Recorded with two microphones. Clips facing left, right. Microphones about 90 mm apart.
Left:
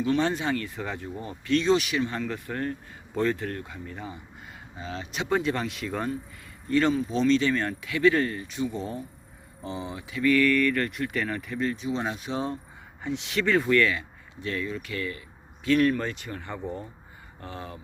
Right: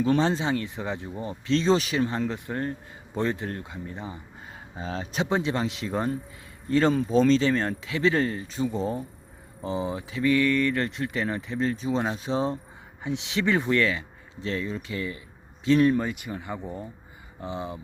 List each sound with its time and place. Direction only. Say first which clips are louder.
0.2 s speech: right 2 dB; 25° right (ahead or behind)
4.8 s speech: right 4 dB; 35° right (ahead or behind)
5.3 s speech: left 1 dB; 20° right (ahead or behind)
16.0 s speech: right 3 dB; 10° right (ahead or behind)